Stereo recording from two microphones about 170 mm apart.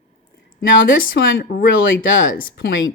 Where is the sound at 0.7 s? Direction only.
90° left.